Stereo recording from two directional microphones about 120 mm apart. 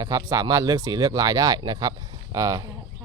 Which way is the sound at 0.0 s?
30° right (ahead or behind).